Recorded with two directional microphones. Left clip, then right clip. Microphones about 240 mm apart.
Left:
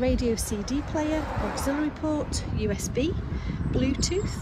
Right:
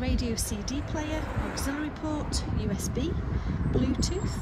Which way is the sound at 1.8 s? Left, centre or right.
Centre.